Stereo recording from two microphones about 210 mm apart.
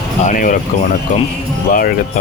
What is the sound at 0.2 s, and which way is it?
Speech, 35° left (ahead or behind).